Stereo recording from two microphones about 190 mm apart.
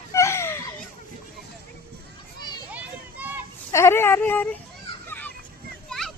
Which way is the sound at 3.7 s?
15° left (ahead or behind).